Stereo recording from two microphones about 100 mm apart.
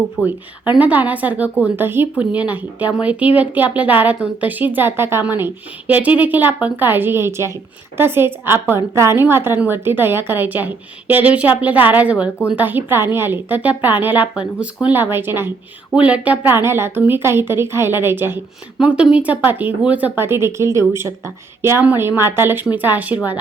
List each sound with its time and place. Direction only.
0.2 s a woman's voice: 15° right (ahead or behind)
16.0 s a woman's voice: 10° right (ahead or behind)
18.8 s a woman's voice: 10° right (ahead or behind)